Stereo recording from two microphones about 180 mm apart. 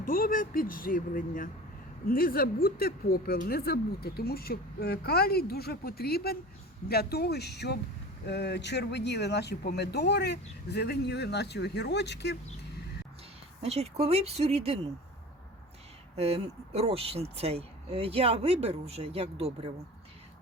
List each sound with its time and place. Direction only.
0.0 s a woman's voice: 50° left (ahead or behind); by 12.4 s 70° left (ahead or behind)
13.6 s speech: 35° right (ahead or behind)
16.1 s speech: 35° right (ahead or behind)